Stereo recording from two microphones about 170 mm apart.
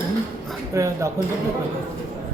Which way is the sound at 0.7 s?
20° right (ahead or behind).